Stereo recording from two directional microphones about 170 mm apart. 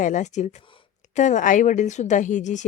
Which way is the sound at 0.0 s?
45° left (ahead or behind).